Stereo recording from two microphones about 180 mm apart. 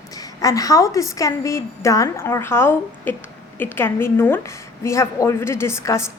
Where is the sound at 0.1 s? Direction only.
20° left (ahead or behind).